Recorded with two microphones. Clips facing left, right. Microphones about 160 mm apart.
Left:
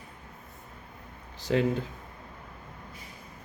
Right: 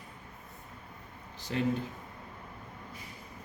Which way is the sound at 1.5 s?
90° left.